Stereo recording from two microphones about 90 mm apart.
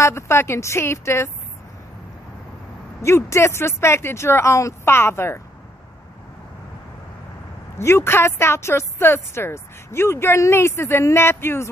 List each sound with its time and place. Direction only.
0.0 s speech: 30° left (ahead or behind)
3.0 s speech: 30° left (ahead or behind)
7.8 s speech: 30° left (ahead or behind)